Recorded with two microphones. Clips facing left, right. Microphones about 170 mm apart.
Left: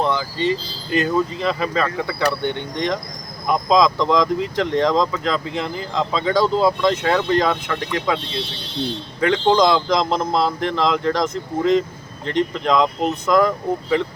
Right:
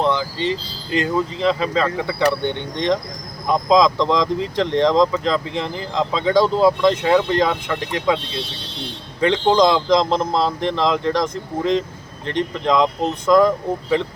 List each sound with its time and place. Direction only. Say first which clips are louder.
0.2 s speech: left 1 dB; 20° right (ahead or behind)
9.2 s speech: right 1 dB; 20° right (ahead or behind)